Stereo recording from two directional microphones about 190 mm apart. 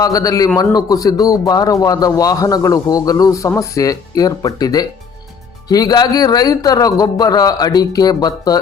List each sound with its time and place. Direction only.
0.0 s a man's voice: 20° left (ahead or behind)